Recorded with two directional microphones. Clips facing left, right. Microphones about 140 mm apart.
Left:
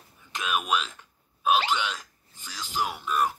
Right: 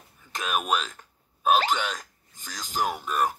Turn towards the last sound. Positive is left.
turn(degrees=-40)  # may be behind; listen again after turning